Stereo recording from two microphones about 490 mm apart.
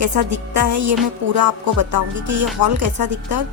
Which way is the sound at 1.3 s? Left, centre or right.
Right.